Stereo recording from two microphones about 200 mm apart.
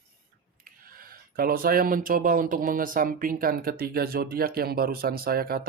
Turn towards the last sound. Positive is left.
turn(degrees=-50)  # may be behind; listen again after turning